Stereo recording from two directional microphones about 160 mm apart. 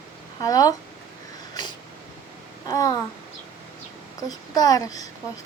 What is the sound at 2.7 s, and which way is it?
Speech, 20° left (ahead or behind).